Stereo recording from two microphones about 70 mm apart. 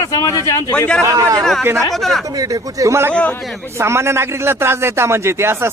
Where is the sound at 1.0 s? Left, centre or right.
Right.